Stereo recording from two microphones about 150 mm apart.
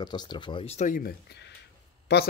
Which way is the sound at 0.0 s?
30° left (ahead or behind).